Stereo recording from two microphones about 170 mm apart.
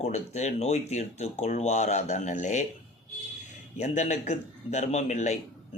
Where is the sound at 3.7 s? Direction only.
45° left (ahead or behind).